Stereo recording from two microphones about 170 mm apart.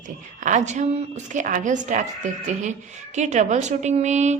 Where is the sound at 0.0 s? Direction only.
45° right (ahead or behind).